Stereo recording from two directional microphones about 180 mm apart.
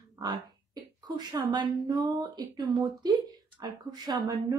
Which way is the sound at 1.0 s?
25° right (ahead or behind).